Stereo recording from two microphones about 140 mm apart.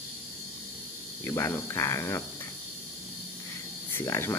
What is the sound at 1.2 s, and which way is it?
Speech, 20° left (ahead or behind).